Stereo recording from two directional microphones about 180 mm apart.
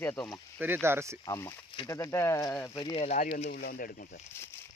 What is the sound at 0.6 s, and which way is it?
Speech, 10° right (ahead or behind).